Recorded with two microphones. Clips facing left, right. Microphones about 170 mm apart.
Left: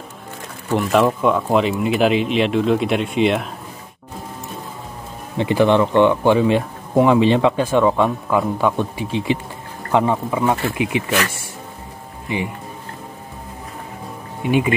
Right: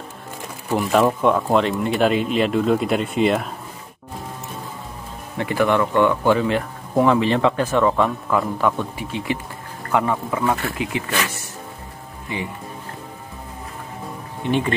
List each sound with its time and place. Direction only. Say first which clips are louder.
0.7 s speech: left 1 dB; centre (ahead or behind)
5.4 s speech: left 4 dB; 20° left (ahead or behind)
14.4 s speech: left 3 dB; 10° left (ahead or behind)